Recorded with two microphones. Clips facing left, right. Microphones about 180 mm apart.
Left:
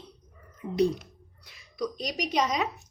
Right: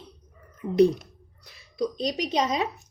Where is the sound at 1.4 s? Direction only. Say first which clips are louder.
Right 4 dB; 35° right (ahead or behind).